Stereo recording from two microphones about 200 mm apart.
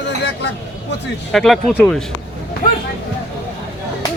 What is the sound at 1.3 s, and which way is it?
Speech, centre (ahead or behind).